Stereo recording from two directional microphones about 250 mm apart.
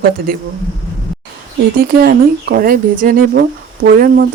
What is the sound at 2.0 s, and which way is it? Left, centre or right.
Speech, right.